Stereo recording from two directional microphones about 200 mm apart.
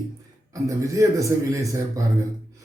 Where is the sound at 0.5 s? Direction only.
15° right (ahead or behind).